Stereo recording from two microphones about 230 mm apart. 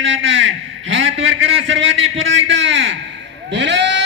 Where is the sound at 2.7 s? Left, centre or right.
Right.